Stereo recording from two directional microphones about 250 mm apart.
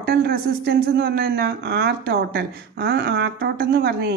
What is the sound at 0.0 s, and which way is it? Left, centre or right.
Speech, right.